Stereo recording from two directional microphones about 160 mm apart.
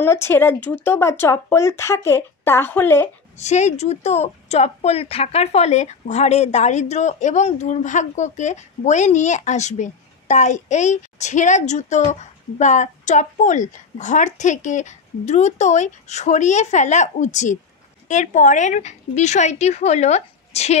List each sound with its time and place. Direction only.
0.0 s speech: 15° left (ahead or behind)
3.3 s speech: 45° left (ahead or behind)